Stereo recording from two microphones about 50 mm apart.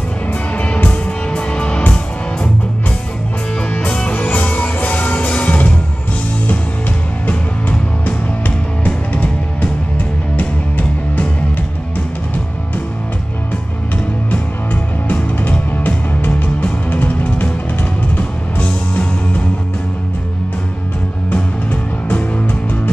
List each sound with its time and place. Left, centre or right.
0.6 s music: left
3.8 s music: left
8.8 s music: left
14.3 s music: left